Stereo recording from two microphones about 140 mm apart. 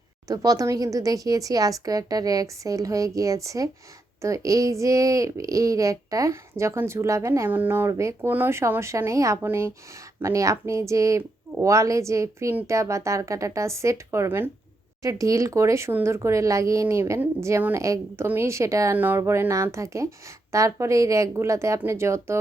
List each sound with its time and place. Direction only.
0.3 s speech: 25° right (ahead or behind)